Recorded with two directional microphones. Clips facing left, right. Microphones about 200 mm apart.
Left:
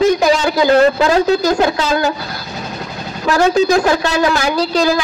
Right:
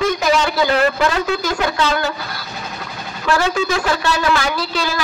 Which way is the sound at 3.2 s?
40° left (ahead or behind).